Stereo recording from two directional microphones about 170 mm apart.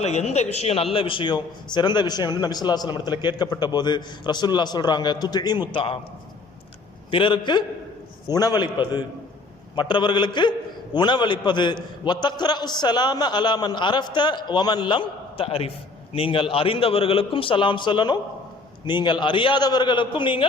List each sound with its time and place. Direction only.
0.0 s a man's voice: 40° left (ahead or behind)
7.1 s a man's voice: 30° left (ahead or behind)